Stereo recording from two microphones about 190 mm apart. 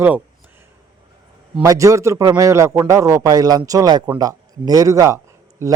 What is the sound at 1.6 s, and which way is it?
A man's voice, 15° right (ahead or behind).